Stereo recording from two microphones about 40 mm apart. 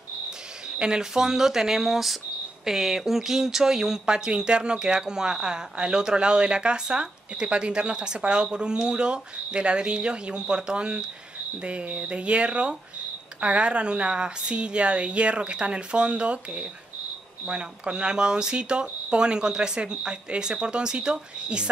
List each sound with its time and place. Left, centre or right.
0.7 s speech: centre